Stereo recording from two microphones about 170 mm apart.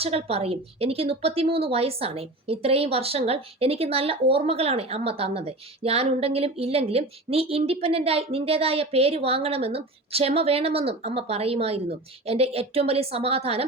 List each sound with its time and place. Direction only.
0.0 s a woman's voice: 35° right (ahead or behind)